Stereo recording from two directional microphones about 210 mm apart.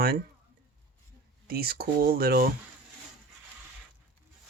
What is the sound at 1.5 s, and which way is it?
Speech, 45° right (ahead or behind).